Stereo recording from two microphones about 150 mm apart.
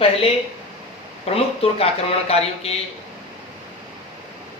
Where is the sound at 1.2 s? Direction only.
40° left (ahead or behind).